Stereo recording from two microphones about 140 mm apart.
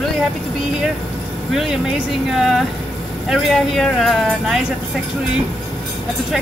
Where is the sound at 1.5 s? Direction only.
Centre (ahead or behind).